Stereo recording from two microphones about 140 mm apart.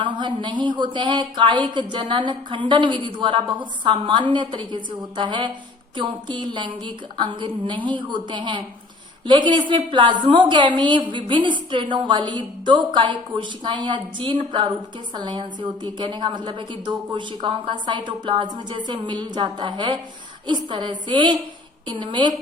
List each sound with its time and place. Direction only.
0.0 s a woman's voice: 35° right (ahead or behind)